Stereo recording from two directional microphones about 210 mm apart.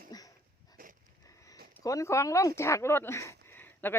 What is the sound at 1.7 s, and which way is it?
Speech, 15° left (ahead or behind).